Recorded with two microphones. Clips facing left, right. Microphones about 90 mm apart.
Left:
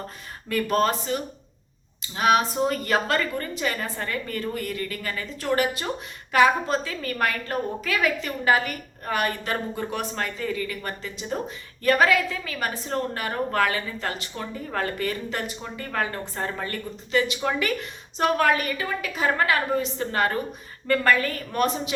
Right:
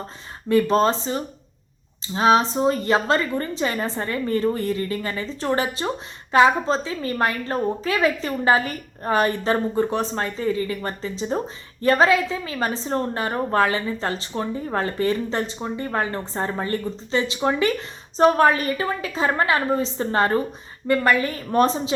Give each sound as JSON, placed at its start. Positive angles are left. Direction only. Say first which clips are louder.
{"t": 0.4, "sound": "a woman's voice", "louder": "right 5 dB", "side_deg": -25}
{"t": 20.8, "sound": "a woman's voice", "louder": "right 2 dB", "side_deg": -20}
{"t": 21.5, "sound": "a woman's voice", "louder": "right 6 dB", "side_deg": -30}